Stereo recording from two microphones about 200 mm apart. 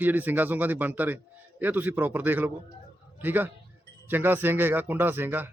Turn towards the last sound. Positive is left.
turn(degrees=-10)  # may be behind; listen again after turning